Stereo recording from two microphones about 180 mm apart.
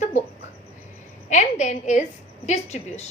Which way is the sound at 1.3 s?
40° left (ahead or behind).